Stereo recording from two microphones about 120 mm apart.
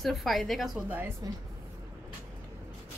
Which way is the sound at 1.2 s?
30° right (ahead or behind).